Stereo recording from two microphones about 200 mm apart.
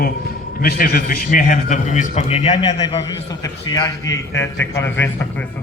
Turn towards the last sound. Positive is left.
turn(degrees=10)  # may be behind; listen again after turning